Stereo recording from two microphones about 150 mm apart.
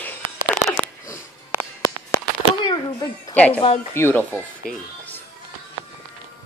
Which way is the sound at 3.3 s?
10° left (ahead or behind).